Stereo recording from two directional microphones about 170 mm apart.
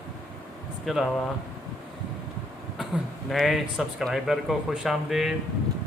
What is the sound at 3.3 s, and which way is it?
Speech, centre (ahead or behind).